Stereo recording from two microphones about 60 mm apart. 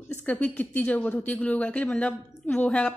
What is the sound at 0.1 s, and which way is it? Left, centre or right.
Speech, left.